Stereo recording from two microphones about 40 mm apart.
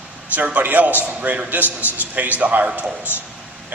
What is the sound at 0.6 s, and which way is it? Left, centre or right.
A man's voice, right.